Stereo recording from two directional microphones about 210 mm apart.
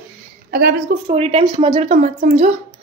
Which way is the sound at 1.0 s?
30° right (ahead or behind).